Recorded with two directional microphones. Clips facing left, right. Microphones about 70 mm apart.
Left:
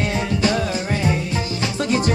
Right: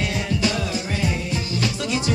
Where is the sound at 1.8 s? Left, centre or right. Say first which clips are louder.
Left 8 dB; left.